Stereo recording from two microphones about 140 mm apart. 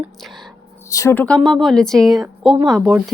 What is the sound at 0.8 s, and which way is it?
Speech, 20° left (ahead or behind).